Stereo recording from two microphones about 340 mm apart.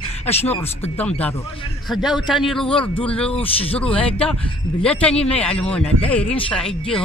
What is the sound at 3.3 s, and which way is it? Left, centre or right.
Speech, centre.